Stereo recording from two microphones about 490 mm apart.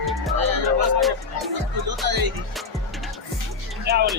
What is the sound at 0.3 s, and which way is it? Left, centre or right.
Music, right.